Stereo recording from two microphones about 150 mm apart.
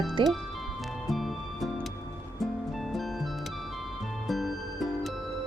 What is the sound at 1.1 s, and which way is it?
Music, centre (ahead or behind).